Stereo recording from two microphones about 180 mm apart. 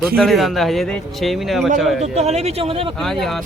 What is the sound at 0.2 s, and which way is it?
Speech, centre (ahead or behind).